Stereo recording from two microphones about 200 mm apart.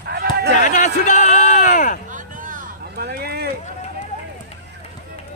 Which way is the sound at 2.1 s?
40° right (ahead or behind).